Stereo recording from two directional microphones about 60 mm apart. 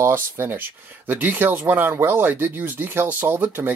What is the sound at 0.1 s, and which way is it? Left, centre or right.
Speech, right.